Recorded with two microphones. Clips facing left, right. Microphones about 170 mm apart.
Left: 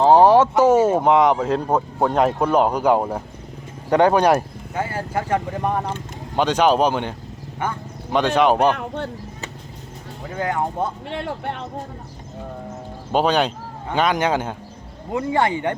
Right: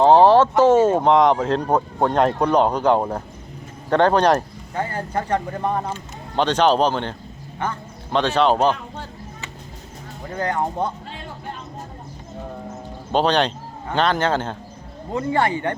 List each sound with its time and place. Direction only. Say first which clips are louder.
0.0 s speech: even; 10° left (ahead or behind)
8.7 s a sound: left 5 dB; 65° left (ahead or behind)
10.2 s speech: even; 5° left (ahead or behind)
11.1 s speech: left 7 dB; 70° left (ahead or behind)
13.1 s speech: even; 5° left (ahead or behind)